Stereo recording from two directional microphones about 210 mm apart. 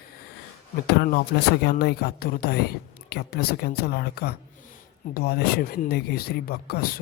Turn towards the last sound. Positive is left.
turn(degrees=45)  # may be behind; listen again after turning